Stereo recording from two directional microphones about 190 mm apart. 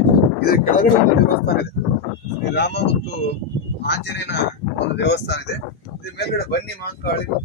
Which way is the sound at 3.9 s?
65° left (ahead or behind).